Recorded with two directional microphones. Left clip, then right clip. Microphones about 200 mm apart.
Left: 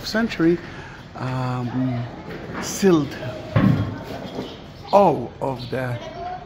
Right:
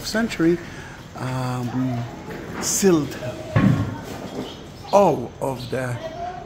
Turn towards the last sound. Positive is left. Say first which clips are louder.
# even
turn(degrees=0)  # may be behind; listen again after turning